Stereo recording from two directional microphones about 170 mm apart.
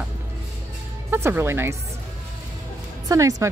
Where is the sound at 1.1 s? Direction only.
15° right (ahead or behind).